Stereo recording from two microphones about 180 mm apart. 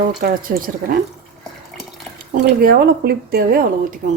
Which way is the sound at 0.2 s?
50° right (ahead or behind).